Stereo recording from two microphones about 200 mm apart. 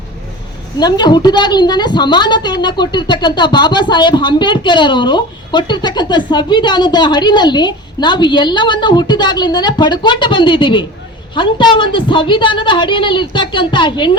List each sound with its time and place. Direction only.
0.8 s a woman's voice: 20° left (ahead or behind)